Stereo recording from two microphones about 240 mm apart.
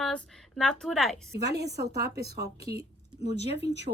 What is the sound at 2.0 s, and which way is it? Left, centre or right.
Speech, right.